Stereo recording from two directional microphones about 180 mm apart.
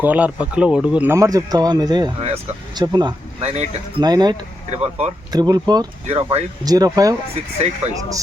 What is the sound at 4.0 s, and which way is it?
Speech, 20° right (ahead or behind).